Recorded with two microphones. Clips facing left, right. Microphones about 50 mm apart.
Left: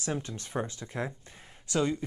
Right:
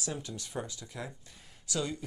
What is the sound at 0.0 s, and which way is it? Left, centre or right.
Speech, left.